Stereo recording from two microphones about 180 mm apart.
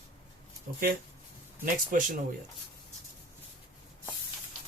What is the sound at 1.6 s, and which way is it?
Speech, 50° right (ahead or behind).